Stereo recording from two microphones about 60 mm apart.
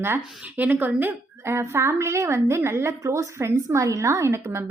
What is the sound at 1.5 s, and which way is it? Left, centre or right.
A woman's voice, right.